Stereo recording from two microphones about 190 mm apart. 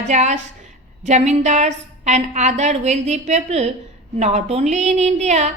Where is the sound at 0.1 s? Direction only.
35° right (ahead or behind).